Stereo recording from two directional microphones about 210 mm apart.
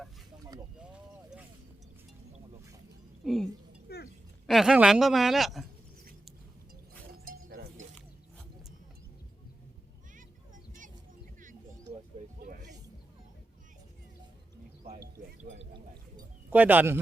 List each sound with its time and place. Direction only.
3.2 s speech: centre (ahead or behind)
3.8 s a sound: 50° left (ahead or behind)
4.4 s speech: centre (ahead or behind)
7.3 s chink: 40° right (ahead or behind)
15.4 s drip: 35° right (ahead or behind)
16.1 s a sound: 10° right (ahead or behind)